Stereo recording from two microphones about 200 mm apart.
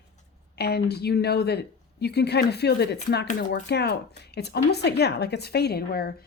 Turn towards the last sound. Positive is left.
turn(degrees=50)  # may be behind; listen again after turning